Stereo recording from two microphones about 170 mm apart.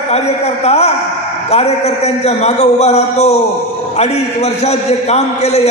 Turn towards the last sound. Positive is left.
turn(degrees=40)  # may be behind; listen again after turning